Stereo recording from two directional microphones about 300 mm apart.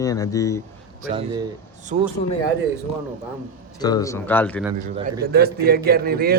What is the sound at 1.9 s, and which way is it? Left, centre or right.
Speech, right.